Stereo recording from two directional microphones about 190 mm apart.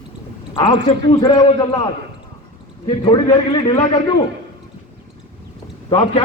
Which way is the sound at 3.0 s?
25° left (ahead or behind).